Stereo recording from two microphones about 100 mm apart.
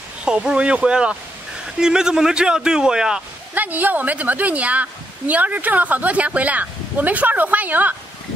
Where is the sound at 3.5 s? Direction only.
15° right (ahead or behind).